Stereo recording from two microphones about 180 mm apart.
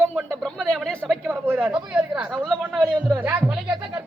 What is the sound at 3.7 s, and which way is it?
Speech, 25° right (ahead or behind).